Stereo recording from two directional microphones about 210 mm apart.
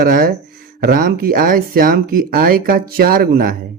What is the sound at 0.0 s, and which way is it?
Speech, 45° right (ahead or behind).